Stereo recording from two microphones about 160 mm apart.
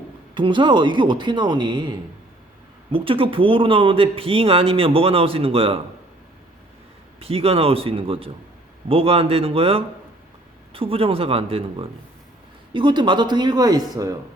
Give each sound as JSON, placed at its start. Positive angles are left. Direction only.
{"t": 0.3, "sound": "speech", "side_deg": -30}
{"t": 7.2, "sound": "speech", "side_deg": -35}